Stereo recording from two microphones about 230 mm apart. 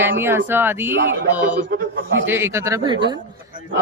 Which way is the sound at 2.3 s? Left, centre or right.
Centre.